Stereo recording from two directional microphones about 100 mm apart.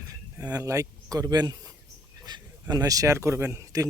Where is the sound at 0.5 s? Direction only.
35° right (ahead or behind).